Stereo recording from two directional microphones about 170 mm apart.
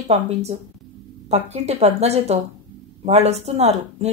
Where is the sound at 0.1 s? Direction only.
40° right (ahead or behind).